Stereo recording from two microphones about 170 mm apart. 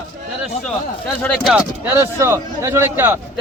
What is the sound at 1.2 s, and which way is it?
Speech, 10° left (ahead or behind).